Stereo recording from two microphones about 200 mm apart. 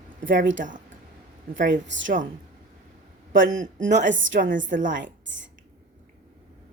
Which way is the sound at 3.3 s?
75° right (ahead or behind).